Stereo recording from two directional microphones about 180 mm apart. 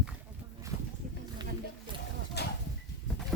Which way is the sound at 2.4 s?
65° left (ahead or behind).